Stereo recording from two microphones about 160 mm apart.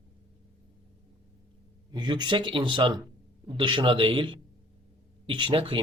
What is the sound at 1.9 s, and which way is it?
Speech, 25° right (ahead or behind).